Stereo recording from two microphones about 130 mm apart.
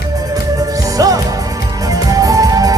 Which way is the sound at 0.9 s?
30° right (ahead or behind).